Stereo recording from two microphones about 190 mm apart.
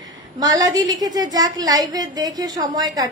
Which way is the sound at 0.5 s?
20° right (ahead or behind).